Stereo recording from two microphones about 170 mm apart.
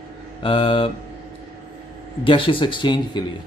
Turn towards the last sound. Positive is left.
turn(degrees=25)  # may be behind; listen again after turning